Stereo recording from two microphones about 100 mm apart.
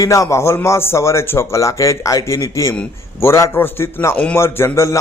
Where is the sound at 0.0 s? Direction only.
35° left (ahead or behind); by 4.4 s 15° left (ahead or behind).